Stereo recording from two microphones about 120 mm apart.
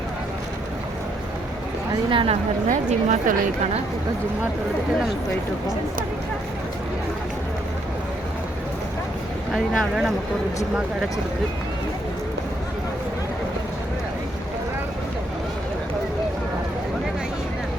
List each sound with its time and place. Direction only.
2.0 s speech: 50° right (ahead or behind)
2.6 s a woman's voice: 90° right
9.5 s speech: 5° right (ahead or behind)